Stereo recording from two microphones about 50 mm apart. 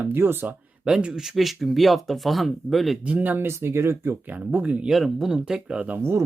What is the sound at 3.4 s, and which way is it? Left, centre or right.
Speech, right.